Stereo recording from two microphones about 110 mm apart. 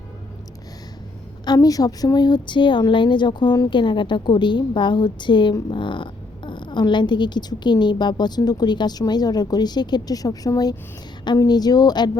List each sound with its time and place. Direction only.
1.5 s a woman's voice: 35° left (ahead or behind)